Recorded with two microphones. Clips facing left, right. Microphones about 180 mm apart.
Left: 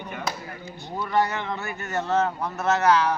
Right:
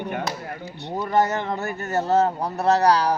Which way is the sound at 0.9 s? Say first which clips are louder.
Right 3 dB; 45° right (ahead or behind).